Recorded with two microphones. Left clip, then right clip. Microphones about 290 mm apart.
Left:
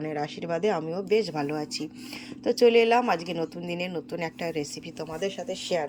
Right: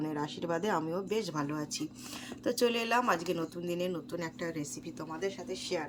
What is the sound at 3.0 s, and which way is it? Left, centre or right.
Speech, right.